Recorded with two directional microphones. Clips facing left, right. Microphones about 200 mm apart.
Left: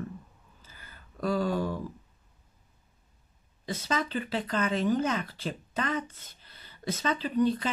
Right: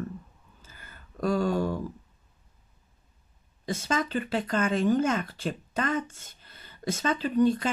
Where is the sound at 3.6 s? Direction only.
50° right (ahead or behind).